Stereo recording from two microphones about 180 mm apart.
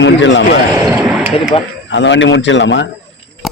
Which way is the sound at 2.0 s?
90° left.